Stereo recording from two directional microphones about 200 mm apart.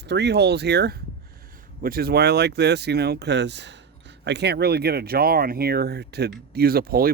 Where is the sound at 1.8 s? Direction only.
50° right (ahead or behind).